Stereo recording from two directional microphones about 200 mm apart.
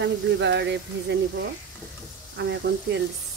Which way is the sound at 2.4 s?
60° right (ahead or behind).